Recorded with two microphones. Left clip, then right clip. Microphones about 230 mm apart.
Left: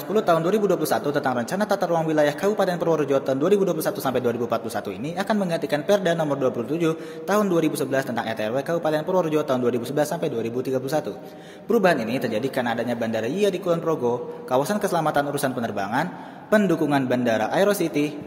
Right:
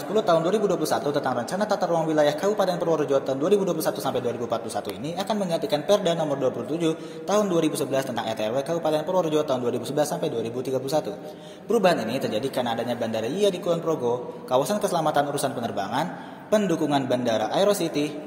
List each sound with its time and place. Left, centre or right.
0.1 s speech: left